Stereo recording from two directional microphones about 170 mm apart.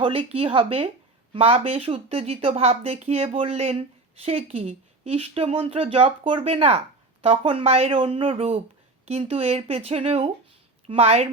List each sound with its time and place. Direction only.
0.0 s speech: 35° right (ahead or behind)